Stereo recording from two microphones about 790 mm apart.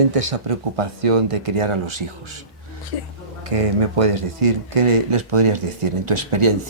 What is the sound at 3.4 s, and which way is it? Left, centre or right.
Speech, right.